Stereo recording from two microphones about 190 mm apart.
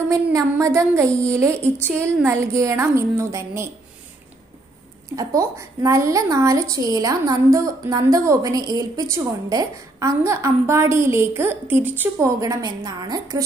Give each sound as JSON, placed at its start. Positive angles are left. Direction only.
{"t": 0.1, "sound": "a woman's voice", "side_deg": -15}
{"t": 5.1, "sound": "a woman's voice", "side_deg": -15}